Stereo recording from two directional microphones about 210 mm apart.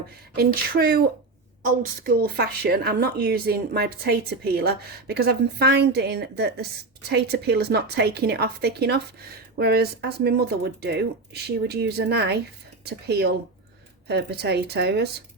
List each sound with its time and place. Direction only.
0.3 s speech: 45° right (ahead or behind)
2.0 s speech: 45° right (ahead or behind)